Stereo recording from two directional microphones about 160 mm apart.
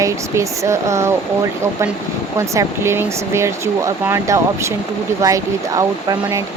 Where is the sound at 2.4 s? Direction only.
15° right (ahead or behind).